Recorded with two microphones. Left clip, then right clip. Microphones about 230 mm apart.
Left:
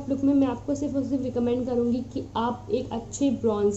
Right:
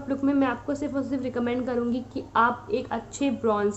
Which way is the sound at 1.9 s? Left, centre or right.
Right.